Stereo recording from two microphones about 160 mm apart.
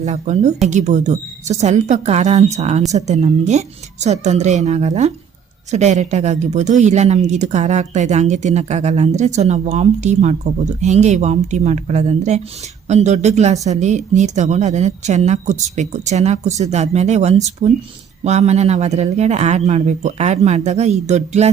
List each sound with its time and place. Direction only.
0.0 s speech: 45° right (ahead or behind)